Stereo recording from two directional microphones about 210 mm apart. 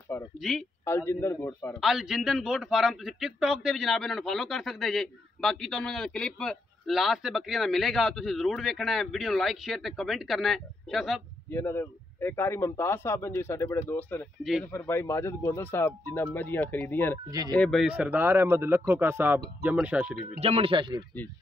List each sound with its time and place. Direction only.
0.4 s a man's voice: centre (ahead or behind)
0.8 s a man's voice: 10° left (ahead or behind)
1.8 s a man's voice: centre (ahead or behind)
11.5 s a man's voice: 10° left (ahead or behind)
17.3 s speech: 15° right (ahead or behind)
17.6 s speech: centre (ahead or behind)
20.3 s speech: 30° right (ahead or behind)